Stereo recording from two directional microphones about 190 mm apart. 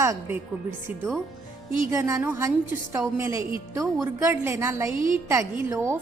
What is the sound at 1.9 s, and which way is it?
A woman's voice, 15° right (ahead or behind).